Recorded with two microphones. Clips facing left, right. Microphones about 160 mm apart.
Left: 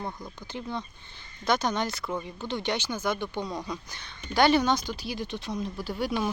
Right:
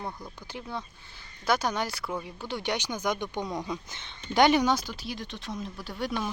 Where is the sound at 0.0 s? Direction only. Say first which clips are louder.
Left 1 dB; 10° right (ahead or behind).